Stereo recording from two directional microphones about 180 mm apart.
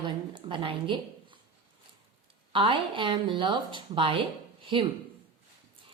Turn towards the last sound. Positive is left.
turn(degrees=-30)  # may be behind; listen again after turning